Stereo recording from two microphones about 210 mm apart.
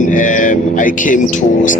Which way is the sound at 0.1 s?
40° left (ahead or behind).